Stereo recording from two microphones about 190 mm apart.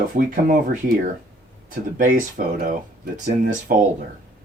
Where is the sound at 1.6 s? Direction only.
45° right (ahead or behind).